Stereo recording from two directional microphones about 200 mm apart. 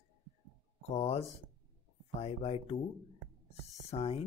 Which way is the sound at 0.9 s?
30° left (ahead or behind).